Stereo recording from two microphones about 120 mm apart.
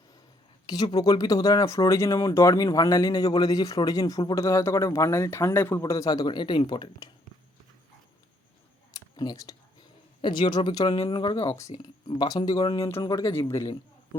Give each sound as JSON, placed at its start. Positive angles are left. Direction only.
{"t": 0.7, "sound": "speech", "side_deg": 35}
{"t": 5.8, "sound": "speech", "side_deg": 30}
{"t": 9.1, "sound": "speech", "side_deg": 30}
{"t": 11.8, "sound": "speech", "side_deg": 35}